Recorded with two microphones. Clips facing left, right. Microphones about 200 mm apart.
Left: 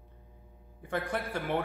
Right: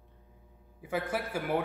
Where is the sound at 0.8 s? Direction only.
5° right (ahead or behind).